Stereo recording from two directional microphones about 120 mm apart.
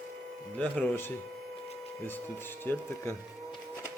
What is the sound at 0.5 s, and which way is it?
Speech, 10° left (ahead or behind).